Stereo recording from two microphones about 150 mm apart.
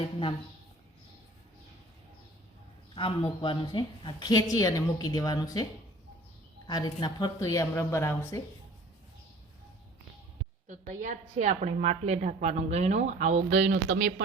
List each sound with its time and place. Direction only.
2.9 s a man's voice: 35° left (ahead or behind)
6.7 s a woman's voice: 25° left (ahead or behind)
10.7 s a woman's voice: 55° right (ahead or behind)